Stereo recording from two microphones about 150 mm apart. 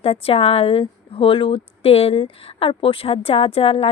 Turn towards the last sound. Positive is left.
turn(degrees=40)  # may be behind; listen again after turning